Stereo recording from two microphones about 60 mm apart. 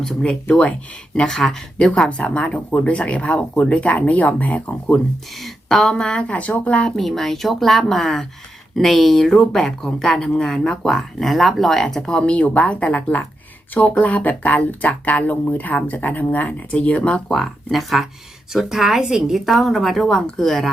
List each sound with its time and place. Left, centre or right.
0.0 s speech: centre
2.0 s speech: left
5.4 s speech: centre
6.9 s a woman's voice: centre; by 17.2 s left
17.2 s a woman's voice: centre